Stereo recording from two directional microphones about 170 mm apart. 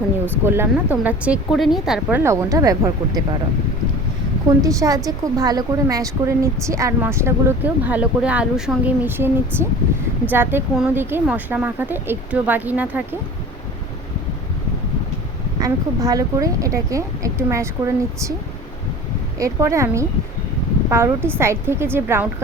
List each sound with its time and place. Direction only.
0.4 s a woman's voice: 15° right (ahead or behind)
4.6 s a woman's voice: 20° right (ahead or behind)
15.5 s speech: 20° right (ahead or behind)
19.4 s a woman's voice: 20° right (ahead or behind)